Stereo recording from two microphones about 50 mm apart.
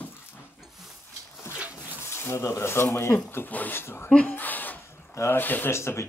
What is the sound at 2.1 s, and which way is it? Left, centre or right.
Speech, left.